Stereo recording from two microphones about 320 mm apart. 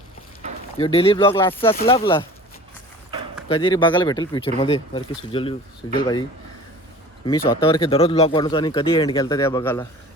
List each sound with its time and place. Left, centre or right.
0.8 s speech: centre
3.5 s speech: centre
7.6 s speech: centre